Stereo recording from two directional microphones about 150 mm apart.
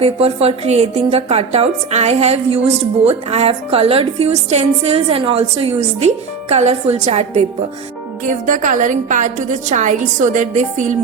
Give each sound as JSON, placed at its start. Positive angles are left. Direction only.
{"t": 0.0, "sound": "a woman's voice", "side_deg": -45}
{"t": 8.2, "sound": "a woman's voice", "side_deg": -60}